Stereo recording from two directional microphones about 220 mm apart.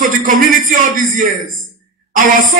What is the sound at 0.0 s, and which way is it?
Speech, 40° right (ahead or behind).